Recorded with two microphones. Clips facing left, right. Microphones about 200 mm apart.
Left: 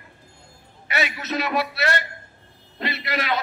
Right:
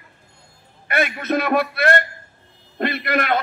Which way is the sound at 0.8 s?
55° right (ahead or behind).